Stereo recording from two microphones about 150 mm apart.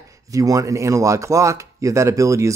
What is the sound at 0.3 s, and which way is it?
Speech, 20° right (ahead or behind).